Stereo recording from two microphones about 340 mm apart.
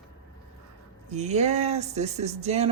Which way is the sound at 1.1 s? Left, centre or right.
Centre.